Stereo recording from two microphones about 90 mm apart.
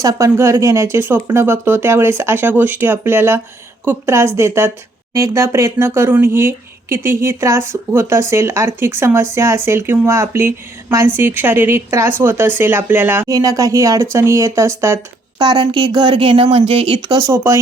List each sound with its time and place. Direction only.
0.0 s speech: 40° right (ahead or behind)
0.3 s speech: 30° right (ahead or behind)
13.2 s speech: 40° right (ahead or behind)
15.4 s a woman's voice: 55° right (ahead or behind); by 17.0 s 90° right
17.0 s speech: 45° right (ahead or behind)
17.3 s speech: 30° right (ahead or behind)